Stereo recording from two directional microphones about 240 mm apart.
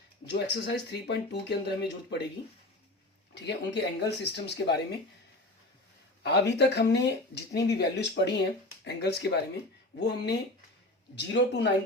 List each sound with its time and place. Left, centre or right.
0.3 s speech: left
3.3 s speech: left
6.2 s speech: left